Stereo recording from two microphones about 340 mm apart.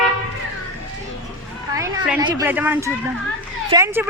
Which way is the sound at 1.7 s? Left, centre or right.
Centre.